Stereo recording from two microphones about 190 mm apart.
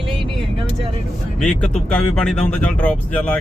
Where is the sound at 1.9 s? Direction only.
5° left (ahead or behind).